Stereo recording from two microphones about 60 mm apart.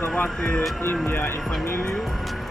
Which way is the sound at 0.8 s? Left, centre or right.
Left.